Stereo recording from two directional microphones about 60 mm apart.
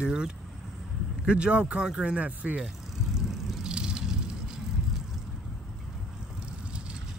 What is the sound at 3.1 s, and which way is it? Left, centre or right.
Vehicle, centre.